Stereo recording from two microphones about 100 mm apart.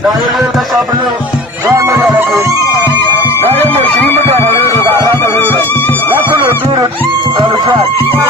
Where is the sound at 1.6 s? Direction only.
35° right (ahead or behind).